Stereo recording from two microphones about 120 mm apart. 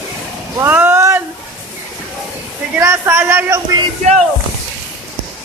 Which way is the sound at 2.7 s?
20° right (ahead or behind).